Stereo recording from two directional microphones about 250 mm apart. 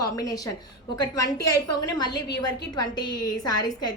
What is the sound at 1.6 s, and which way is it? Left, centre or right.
A woman's voice, centre.